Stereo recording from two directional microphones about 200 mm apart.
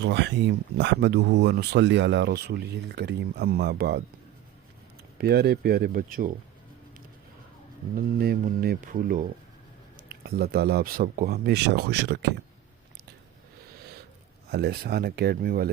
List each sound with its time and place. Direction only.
0.0 s speech: 60° right (ahead or behind)
5.1 s speech: 50° right (ahead or behind)
7.9 s speech: 50° right (ahead or behind)
14.5 s speech: 55° right (ahead or behind)